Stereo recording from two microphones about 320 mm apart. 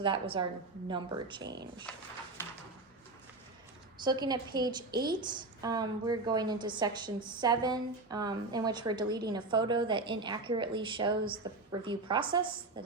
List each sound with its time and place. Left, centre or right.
0.0 s a woman's voice: centre
2.4 s a sound: centre
3.9 s a woman's voice: centre